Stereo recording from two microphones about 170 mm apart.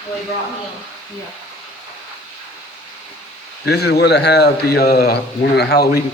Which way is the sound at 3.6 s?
70° left (ahead or behind).